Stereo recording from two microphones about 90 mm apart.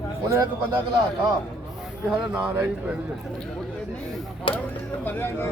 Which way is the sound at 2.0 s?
10° right (ahead or behind).